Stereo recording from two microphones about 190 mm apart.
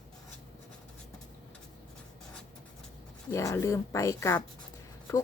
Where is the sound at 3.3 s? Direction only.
15° left (ahead or behind).